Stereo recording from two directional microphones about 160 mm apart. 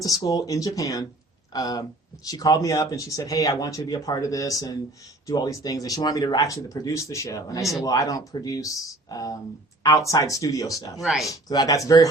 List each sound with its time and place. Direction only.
0.0 s speech: 25° left (ahead or behind)
11.0 s speech: centre (ahead or behind)
11.3 s speech: 25° left (ahead or behind)